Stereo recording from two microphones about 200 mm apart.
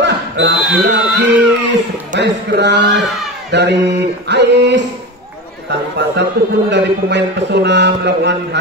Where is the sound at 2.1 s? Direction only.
60° right (ahead or behind).